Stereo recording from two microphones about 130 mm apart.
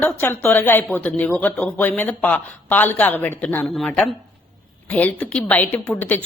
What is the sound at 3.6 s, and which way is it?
Speech, 5° left (ahead or behind).